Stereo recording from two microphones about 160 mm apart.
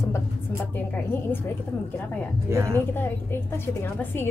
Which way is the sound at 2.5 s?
15° right (ahead or behind).